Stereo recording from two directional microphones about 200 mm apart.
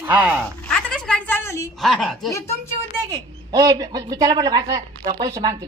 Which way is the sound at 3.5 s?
20° right (ahead or behind).